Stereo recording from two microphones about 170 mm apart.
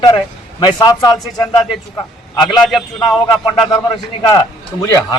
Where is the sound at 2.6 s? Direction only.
Centre (ahead or behind).